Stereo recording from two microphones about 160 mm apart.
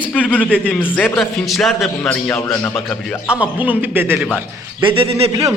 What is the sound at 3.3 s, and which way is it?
Speech, 5° right (ahead or behind).